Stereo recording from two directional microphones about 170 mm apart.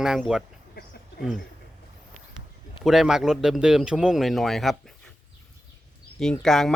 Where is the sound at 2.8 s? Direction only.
Centre (ahead or behind).